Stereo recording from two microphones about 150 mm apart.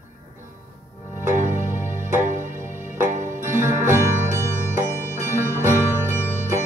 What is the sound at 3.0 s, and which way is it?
Music, 60° right (ahead or behind).